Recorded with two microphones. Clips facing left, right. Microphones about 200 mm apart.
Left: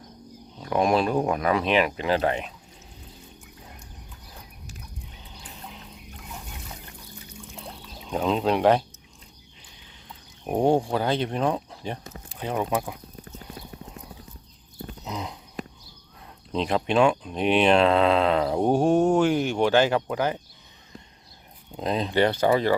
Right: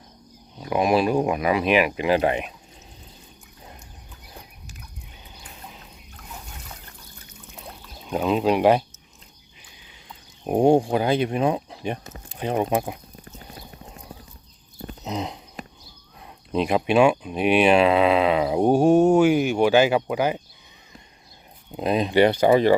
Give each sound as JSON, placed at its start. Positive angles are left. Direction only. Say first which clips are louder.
{"t": 0.6, "sound": "speech", "louder": "right 2 dB", "side_deg": -10}
{"t": 5.4, "sound": "a sound", "louder": "left 1 dB", "side_deg": -10}
{"t": 7.6, "sound": "pour", "louder": "right 2 dB", "side_deg": -5}
{"t": 10.4, "sound": "speech", "louder": "right 4 dB", "side_deg": -15}
{"t": 15.0, "sound": "horse", "louder": "right 5 dB", "side_deg": -20}
{"t": 16.5, "sound": "speech", "louder": "right 3 dB", "side_deg": -10}
{"t": 21.8, "sound": "speech", "louder": "right 4 dB", "side_deg": -15}